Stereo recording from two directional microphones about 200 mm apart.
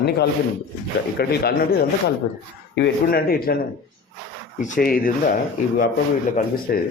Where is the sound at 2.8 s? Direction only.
50° left (ahead or behind).